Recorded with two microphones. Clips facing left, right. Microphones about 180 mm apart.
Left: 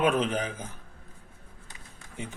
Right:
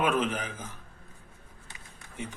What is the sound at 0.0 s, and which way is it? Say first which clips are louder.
Speech: left 2 dB; 30° left (ahead or behind).